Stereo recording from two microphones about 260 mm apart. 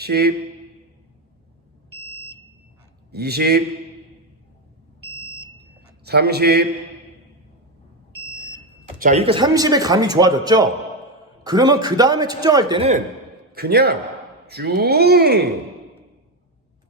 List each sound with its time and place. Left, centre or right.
0.0 s speech: right
3.1 s speech: right
6.1 s speech: right
9.0 s speech: right
13.5 s a man's voice: right